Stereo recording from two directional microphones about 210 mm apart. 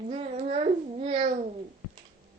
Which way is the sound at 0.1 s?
30° right (ahead or behind).